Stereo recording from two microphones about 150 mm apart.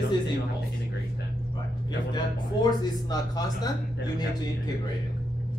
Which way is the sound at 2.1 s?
25° left (ahead or behind).